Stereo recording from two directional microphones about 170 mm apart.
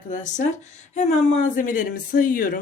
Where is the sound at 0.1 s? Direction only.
45° left (ahead or behind).